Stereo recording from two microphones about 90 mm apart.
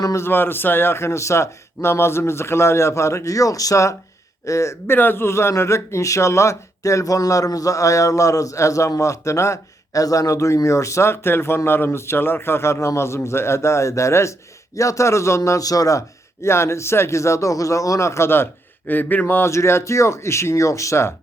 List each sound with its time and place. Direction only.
0.0 s a man's voice: 30° left (ahead or behind)
4.9 s a man's voice: 25° left (ahead or behind)